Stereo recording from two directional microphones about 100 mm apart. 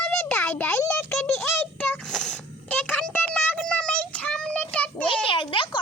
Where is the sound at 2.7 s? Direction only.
15° left (ahead or behind).